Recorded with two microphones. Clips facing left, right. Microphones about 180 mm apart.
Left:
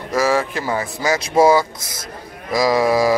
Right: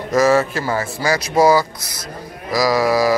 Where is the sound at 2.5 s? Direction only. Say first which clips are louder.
Even; 25° left (ahead or behind).